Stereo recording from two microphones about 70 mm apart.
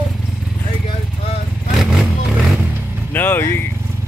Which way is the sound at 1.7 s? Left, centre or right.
Centre.